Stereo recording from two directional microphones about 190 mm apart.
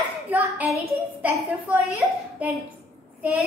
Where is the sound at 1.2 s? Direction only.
10° right (ahead or behind).